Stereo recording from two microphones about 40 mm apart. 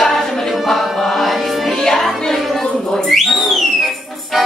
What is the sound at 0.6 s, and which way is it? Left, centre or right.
Music, centre.